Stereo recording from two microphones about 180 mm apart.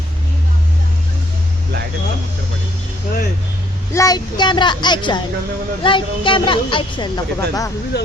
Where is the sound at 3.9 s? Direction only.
20° left (ahead or behind).